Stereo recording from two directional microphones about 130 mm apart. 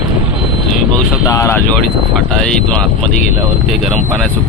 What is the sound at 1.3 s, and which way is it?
Speech, 20° left (ahead or behind).